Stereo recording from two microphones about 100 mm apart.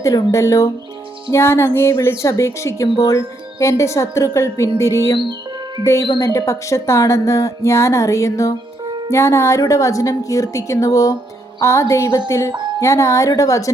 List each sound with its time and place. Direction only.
0.0 s a woman's voice: 35° left (ahead or behind)